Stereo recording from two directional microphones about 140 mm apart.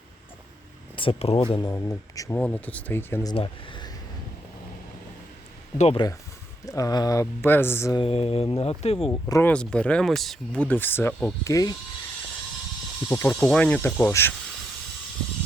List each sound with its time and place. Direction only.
0.9 s speech: 40° left (ahead or behind)
1.7 s speech: 25° left (ahead or behind)
2.3 s speech: 10° left (ahead or behind)
3.3 s speech: 40° left (ahead or behind)
5.7 s speech: 50° left (ahead or behind)
6.7 s speech: 25° left (ahead or behind)
7.9 s speech: 45° left (ahead or behind)
9.5 s speech: 5° left (ahead or behind); by 11.8 s 25° left (ahead or behind)
13.1 s speech: 20° left (ahead or behind)
13.4 s speech: 5° left (ahead or behind)